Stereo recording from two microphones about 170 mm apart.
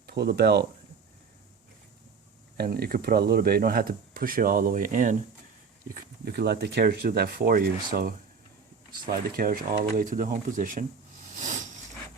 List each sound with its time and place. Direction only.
0.1 s speech: 70° right (ahead or behind)
2.6 s speech: 65° right (ahead or behind); by 10.8 s 50° right (ahead or behind)
11.4 s a sound: 45° right (ahead or behind)